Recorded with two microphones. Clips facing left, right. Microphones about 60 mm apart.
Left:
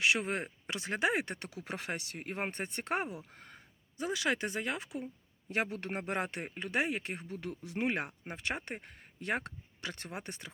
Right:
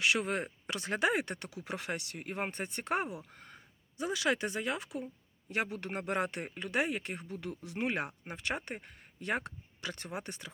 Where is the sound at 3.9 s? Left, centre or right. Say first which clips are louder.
Right 1 dB; left.